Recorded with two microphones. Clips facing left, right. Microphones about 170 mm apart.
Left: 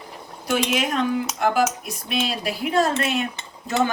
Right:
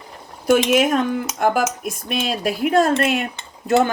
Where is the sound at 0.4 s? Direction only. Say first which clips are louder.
Right 7 dB; 50° right (ahead or behind).